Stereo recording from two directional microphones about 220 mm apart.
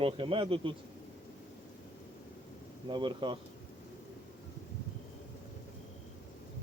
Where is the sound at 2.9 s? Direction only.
20° right (ahead or behind).